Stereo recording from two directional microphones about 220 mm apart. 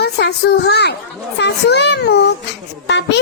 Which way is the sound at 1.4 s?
50° left (ahead or behind).